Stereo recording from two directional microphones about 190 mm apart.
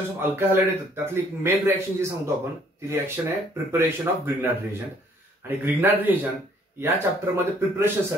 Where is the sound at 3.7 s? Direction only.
10° right (ahead or behind).